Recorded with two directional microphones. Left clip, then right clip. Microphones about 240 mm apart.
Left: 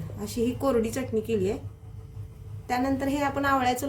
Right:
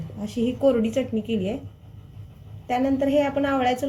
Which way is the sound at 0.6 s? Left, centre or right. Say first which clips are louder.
Right 7 dB; left.